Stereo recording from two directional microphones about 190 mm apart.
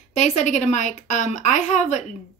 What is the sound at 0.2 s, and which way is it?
A woman's voice, 40° left (ahead or behind).